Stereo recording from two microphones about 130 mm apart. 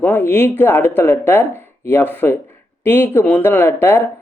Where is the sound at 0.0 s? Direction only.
15° left (ahead or behind).